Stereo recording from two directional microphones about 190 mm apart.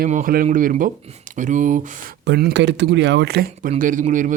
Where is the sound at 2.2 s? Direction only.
60° right (ahead or behind).